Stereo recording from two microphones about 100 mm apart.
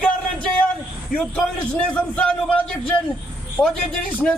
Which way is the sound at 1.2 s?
10° left (ahead or behind).